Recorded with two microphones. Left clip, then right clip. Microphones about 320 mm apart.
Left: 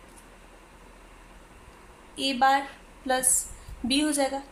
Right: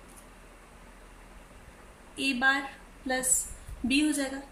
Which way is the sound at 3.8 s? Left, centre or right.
Centre.